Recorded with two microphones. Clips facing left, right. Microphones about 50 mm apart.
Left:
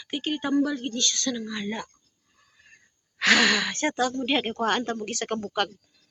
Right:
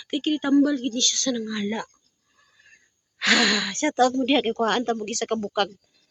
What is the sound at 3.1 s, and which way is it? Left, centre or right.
Speech, left.